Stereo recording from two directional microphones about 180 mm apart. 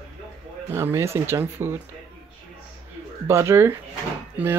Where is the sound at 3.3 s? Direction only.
15° right (ahead or behind).